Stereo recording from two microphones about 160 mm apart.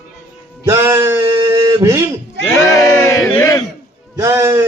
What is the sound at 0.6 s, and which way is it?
Male singing, 15° right (ahead or behind).